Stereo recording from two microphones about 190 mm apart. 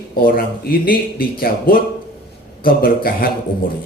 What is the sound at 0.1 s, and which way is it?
Speech, 50° left (ahead or behind).